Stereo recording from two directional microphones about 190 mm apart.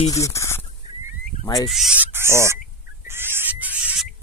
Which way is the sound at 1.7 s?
5° right (ahead or behind).